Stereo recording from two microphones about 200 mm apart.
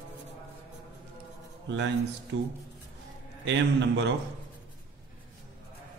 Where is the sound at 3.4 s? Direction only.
60° right (ahead or behind).